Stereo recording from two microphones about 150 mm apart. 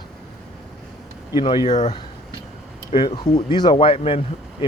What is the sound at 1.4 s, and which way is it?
Speech, 30° left (ahead or behind).